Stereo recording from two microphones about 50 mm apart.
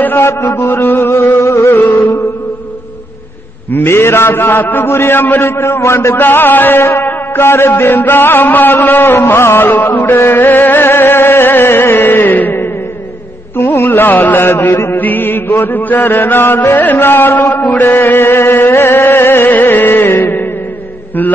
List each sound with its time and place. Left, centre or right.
0.4 s music: left
0.9 s music: left
1.4 s music: left
1.7 s music: left
3.7 s music: left
4.8 s music: left
6.1 s music: left
9.7 s music: left
13.6 s music: left
13.8 s chant: left
14.4 s music: left
15.0 s chant: left
18.5 s music: left